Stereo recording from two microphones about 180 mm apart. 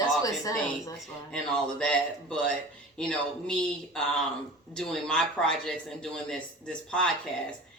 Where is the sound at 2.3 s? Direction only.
5° left (ahead or behind).